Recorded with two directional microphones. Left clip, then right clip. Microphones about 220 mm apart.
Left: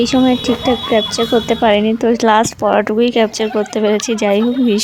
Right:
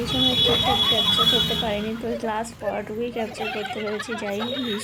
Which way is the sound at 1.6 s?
45° left (ahead or behind).